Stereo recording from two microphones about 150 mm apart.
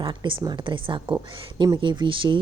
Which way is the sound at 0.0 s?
30° right (ahead or behind).